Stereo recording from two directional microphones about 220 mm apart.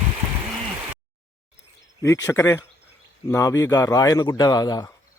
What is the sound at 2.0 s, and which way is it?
A man's voice, 15° left (ahead or behind).